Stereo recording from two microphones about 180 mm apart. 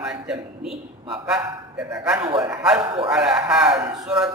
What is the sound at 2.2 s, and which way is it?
Speech, 30° right (ahead or behind).